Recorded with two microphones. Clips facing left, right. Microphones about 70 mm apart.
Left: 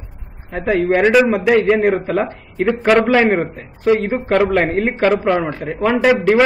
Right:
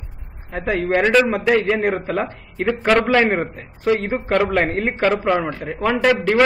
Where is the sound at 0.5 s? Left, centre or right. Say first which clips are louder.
Left 4 dB; centre.